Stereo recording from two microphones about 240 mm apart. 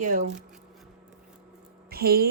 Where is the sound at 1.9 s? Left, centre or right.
Right.